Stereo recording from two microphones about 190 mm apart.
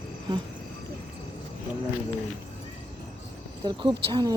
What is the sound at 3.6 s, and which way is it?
Speech, 25° right (ahead or behind).